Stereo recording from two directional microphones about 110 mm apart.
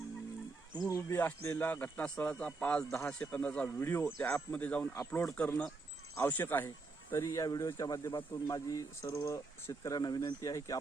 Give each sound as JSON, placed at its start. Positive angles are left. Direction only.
{"t": 0.8, "sound": "speech", "side_deg": 30}
{"t": 7.1, "sound": "speech", "side_deg": 30}